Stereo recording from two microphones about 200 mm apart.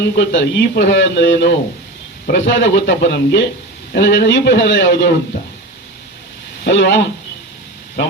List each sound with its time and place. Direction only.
0.0 s a man's voice: 60° left (ahead or behind)
6.7 s a man's voice: 65° left (ahead or behind)